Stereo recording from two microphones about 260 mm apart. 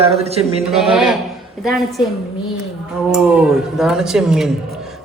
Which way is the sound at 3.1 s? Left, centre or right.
Centre.